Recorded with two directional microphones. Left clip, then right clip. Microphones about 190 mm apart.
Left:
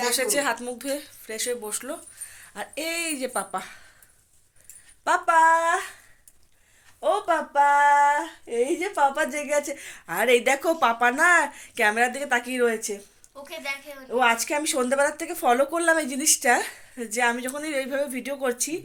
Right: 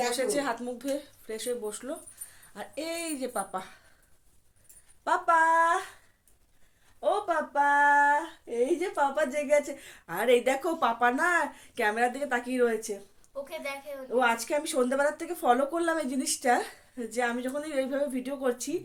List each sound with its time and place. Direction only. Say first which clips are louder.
0.1 s a woman's voice: left 4 dB; 10° left (ahead or behind)
2.3 s speech: left 5 dB; 15° left (ahead or behind)
5.0 s speech: left 5 dB; 20° left (ahead or behind)
7.0 s speech: left 4 dB; 20° left (ahead or behind)
13.3 s a woman's voice: left 3 dB; 50° right (ahead or behind)
14.1 s speech: left 4 dB; 20° left (ahead or behind)